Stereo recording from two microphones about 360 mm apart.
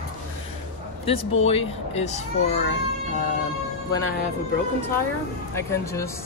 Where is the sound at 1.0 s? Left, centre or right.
Centre.